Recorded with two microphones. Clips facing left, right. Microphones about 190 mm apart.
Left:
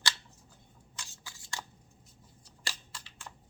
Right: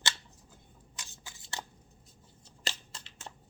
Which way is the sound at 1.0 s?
20° right (ahead or behind).